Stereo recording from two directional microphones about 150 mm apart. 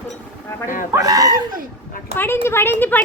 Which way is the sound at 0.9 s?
25° right (ahead or behind).